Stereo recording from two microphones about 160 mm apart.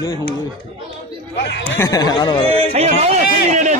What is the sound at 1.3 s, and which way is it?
Speech, 90° left.